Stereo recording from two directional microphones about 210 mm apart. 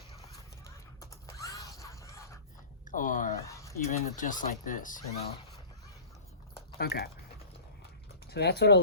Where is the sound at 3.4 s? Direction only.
15° left (ahead or behind).